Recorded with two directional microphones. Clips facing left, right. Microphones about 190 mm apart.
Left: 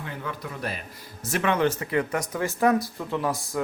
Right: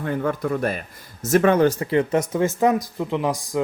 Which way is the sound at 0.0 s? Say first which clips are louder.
Right 11 dB; 50° right (ahead or behind).